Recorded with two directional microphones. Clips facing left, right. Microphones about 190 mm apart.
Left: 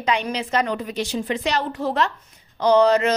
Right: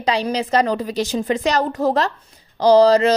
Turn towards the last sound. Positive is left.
turn(degrees=-35)  # may be behind; listen again after turning